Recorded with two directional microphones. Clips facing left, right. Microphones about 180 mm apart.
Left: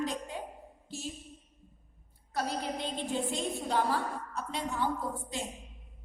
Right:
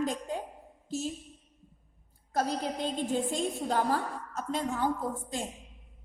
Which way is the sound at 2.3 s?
45° right (ahead or behind).